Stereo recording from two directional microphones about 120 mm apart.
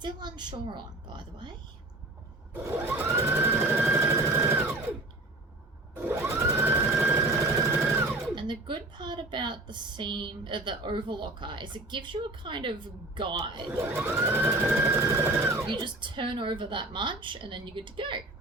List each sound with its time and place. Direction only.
0.0 s a woman's voice: 40° right (ahead or behind)
2.5 s sewing machine: 15° right (ahead or behind)
5.9 s a sound: 20° right (ahead or behind)
8.4 s a woman's voice: 40° right (ahead or behind)
13.7 s speech: 20° right (ahead or behind)
15.6 s a woman's voice: 40° right (ahead or behind)